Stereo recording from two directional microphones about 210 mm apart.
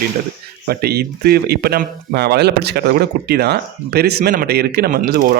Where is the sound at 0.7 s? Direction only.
50° right (ahead or behind).